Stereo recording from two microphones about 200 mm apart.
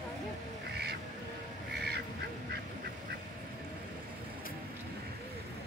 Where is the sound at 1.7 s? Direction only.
55° right (ahead or behind).